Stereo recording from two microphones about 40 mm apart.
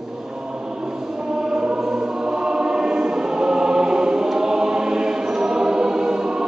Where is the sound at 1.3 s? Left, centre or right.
Centre.